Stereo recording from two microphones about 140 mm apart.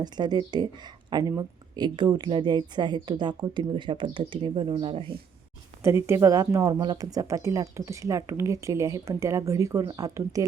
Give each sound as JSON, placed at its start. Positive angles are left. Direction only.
{"t": 0.0, "sound": "speech", "side_deg": -30}
{"t": 5.8, "sound": "speech", "side_deg": -20}